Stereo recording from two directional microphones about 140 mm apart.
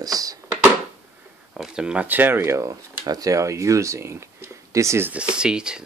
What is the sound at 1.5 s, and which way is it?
Speech, 5° right (ahead or behind).